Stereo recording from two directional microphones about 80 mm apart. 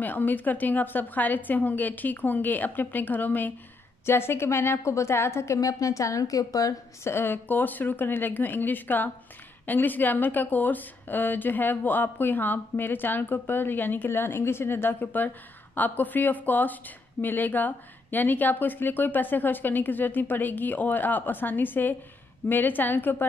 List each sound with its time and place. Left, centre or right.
0.0 s a woman's voice: left
7.1 s a woman's voice: left